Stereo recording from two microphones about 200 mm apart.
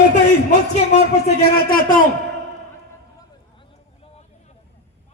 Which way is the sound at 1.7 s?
45° left (ahead or behind).